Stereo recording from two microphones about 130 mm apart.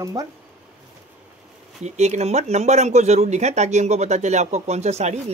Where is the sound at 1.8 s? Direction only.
60° right (ahead or behind).